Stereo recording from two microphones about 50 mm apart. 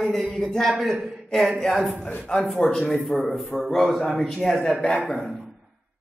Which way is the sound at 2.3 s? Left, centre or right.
Centre.